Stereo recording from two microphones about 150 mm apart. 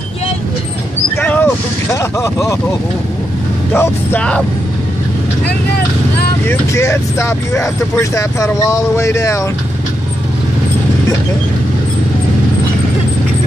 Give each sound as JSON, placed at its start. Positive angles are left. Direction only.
{"t": 1.1, "sound": "a sound", "side_deg": 10}
{"t": 3.7, "sound": "speech", "side_deg": 15}
{"t": 6.4, "sound": "speech", "side_deg": 15}